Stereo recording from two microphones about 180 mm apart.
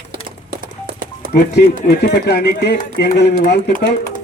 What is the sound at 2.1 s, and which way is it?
Speech, 65° left (ahead or behind).